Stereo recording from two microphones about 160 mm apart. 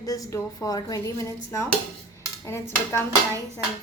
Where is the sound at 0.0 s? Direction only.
20° left (ahead or behind).